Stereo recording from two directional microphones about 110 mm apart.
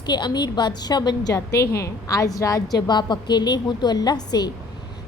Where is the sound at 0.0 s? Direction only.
40° left (ahead or behind).